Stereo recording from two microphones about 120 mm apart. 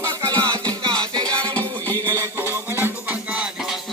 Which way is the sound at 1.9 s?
25° right (ahead or behind).